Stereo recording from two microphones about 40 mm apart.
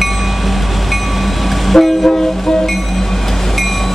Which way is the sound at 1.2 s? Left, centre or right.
Centre.